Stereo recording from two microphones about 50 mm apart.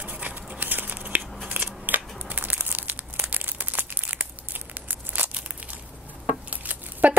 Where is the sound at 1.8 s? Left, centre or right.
Right.